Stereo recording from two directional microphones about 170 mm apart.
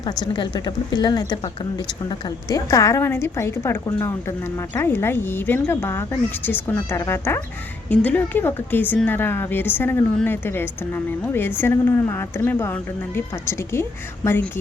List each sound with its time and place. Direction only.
0.3 s a woman's voice: 25° left (ahead or behind)